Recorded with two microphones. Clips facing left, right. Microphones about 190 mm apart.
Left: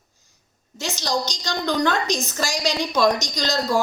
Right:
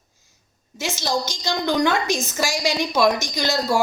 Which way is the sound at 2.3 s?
10° right (ahead or behind).